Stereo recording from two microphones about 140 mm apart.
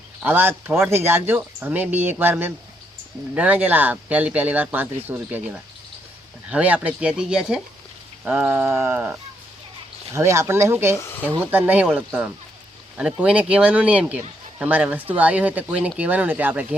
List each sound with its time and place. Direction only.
0.2 s speech: 15° right (ahead or behind)
6.5 s speech: 10° right (ahead or behind)
10.9 s speech: 20° left (ahead or behind)
11.3 s speech: 15° right (ahead or behind)